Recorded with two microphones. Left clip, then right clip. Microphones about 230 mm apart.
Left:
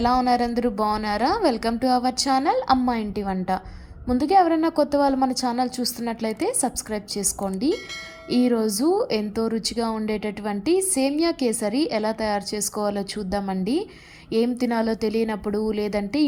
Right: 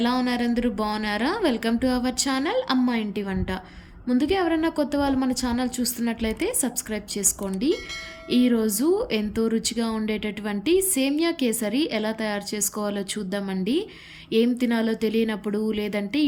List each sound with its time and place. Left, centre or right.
0.2 s a woman's voice: centre
8.6 s a woman's voice: centre
9.0 s a woman's voice: centre